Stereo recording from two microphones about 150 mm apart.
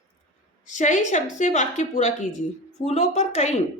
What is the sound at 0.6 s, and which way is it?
A woman's voice, 55° left (ahead or behind).